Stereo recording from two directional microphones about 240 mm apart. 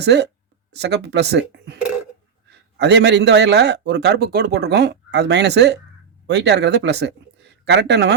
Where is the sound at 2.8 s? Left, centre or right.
Right.